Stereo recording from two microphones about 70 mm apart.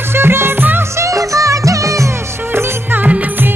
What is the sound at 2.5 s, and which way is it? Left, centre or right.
Music, right.